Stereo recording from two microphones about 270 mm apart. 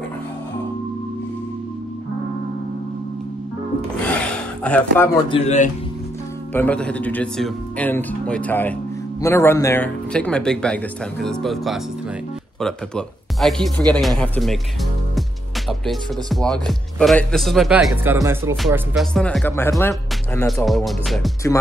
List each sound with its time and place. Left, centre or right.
4.1 s a sound: centre
5.3 s a man's voice: left
6.5 s speech: centre
15.8 s speech: centre